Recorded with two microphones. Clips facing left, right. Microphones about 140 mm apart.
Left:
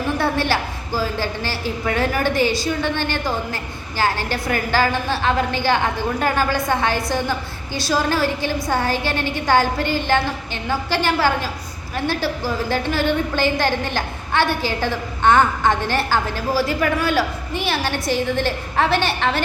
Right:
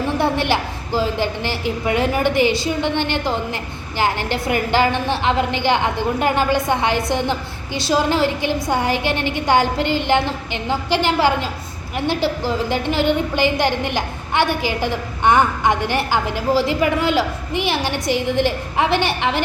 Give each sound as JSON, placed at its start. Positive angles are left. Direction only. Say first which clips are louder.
{"t": 0.2, "sound": "a woman's voice", "louder": "right 3 dB", "side_deg": -20}